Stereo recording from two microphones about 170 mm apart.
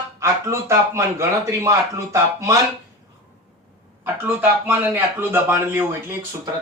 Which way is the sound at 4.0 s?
10° right (ahead or behind).